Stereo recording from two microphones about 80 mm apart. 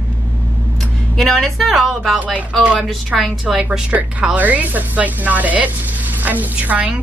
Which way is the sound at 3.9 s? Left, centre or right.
Right.